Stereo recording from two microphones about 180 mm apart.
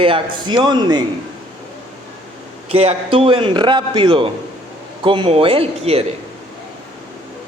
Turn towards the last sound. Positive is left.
turn(degrees=-35)  # may be behind; listen again after turning